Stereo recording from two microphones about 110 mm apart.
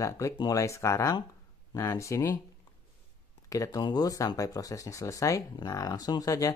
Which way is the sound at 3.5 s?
35° left (ahead or behind).